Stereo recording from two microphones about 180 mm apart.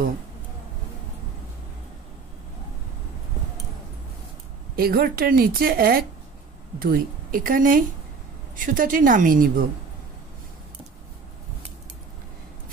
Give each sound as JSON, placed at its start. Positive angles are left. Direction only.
{"t": 4.7, "sound": "a woman's voice", "side_deg": -55}